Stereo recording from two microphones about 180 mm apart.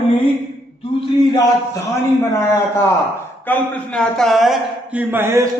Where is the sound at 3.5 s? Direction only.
5° left (ahead or behind).